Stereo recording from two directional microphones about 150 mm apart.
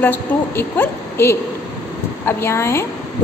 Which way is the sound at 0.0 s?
15° left (ahead or behind).